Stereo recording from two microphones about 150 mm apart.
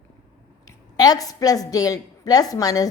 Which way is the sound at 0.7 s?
25° left (ahead or behind).